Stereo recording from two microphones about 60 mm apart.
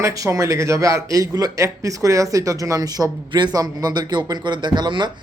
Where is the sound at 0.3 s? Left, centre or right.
Right.